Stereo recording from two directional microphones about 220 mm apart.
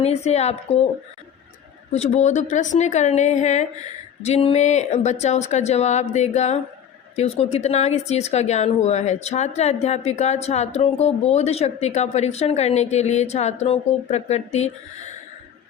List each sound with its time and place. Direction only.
0.0 s speech: 30° left (ahead or behind)
1.9 s speech: 30° left (ahead or behind)